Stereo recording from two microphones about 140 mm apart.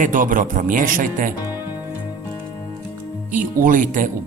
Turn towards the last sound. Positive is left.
turn(degrees=-65)  # may be behind; listen again after turning